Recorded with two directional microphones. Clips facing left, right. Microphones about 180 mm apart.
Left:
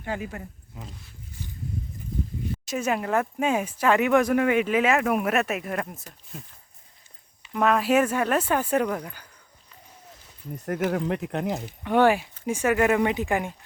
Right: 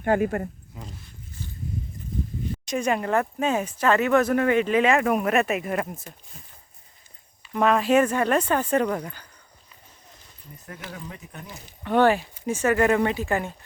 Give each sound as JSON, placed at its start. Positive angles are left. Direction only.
{"t": 0.0, "sound": "speech", "side_deg": -55}
{"t": 0.8, "sound": "speech", "side_deg": 0}
{"t": 2.6, "sound": "speech", "side_deg": 5}
{"t": 7.5, "sound": "speech", "side_deg": 0}
{"t": 10.8, "sound": "speech", "side_deg": 65}
{"t": 11.8, "sound": "speech", "side_deg": 10}